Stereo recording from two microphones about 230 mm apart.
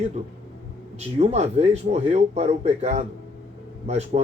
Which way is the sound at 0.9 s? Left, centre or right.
Right.